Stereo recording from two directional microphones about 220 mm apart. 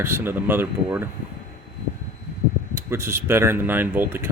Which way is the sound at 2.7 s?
10° right (ahead or behind).